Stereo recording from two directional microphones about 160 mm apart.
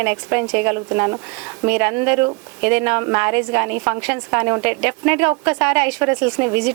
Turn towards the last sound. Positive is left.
turn(degrees=-15)  # may be behind; listen again after turning